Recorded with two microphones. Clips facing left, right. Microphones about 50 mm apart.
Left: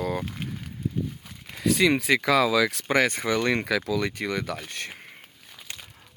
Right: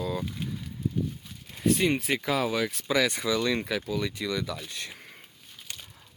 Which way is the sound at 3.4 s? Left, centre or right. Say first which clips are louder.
Left 3 dB; left.